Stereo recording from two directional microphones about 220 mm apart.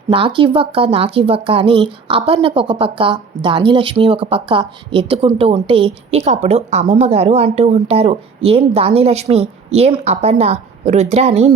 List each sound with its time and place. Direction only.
0.1 s speech: 25° right (ahead or behind)